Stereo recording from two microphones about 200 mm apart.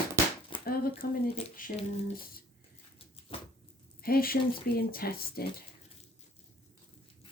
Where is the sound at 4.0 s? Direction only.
50° left (ahead or behind).